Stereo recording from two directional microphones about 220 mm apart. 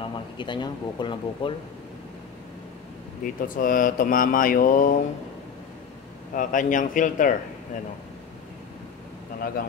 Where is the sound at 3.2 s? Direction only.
40° left (ahead or behind).